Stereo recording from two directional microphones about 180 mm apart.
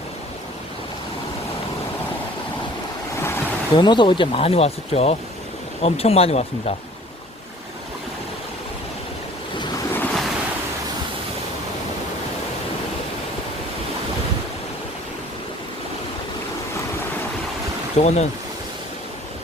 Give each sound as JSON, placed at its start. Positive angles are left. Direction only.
{"t": 3.2, "sound": "a sound", "side_deg": 15}
{"t": 3.8, "sound": "speech", "side_deg": 25}
{"t": 9.6, "sound": "waves", "side_deg": 15}
{"t": 17.9, "sound": "speech", "side_deg": 40}